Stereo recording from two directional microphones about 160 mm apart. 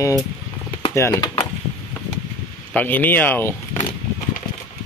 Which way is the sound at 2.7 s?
10° left (ahead or behind).